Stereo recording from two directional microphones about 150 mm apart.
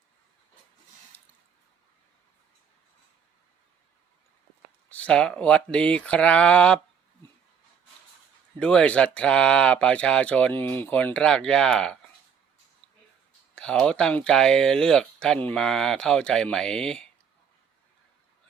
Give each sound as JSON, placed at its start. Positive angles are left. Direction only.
{"t": 4.9, "sound": "speech", "side_deg": 10}
{"t": 8.5, "sound": "speech", "side_deg": 5}
{"t": 13.6, "sound": "speech", "side_deg": 5}